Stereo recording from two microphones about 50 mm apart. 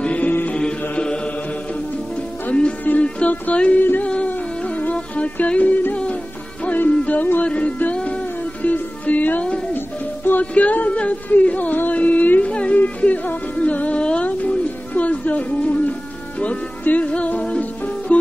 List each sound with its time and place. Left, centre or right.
0.0 s music: left
0.5 s mantra: left
3.0 s music: left
10.4 s music: left